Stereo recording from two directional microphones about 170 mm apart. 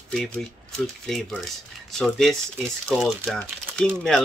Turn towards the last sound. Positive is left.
turn(degrees=5)  # may be behind; listen again after turning